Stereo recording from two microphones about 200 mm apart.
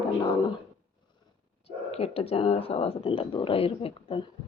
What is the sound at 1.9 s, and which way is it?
Speech, 30° left (ahead or behind).